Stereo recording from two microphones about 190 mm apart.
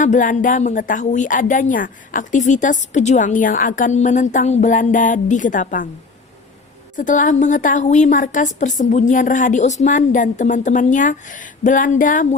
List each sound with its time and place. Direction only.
0.0 s a woman's voice: 45° left (ahead or behind)
6.9 s a woman's voice: 45° left (ahead or behind)